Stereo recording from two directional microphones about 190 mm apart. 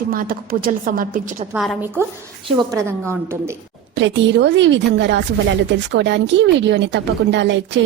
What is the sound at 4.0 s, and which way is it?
Speech, 75° right (ahead or behind).